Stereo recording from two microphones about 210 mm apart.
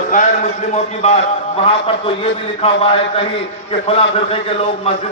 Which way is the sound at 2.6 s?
25° left (ahead or behind).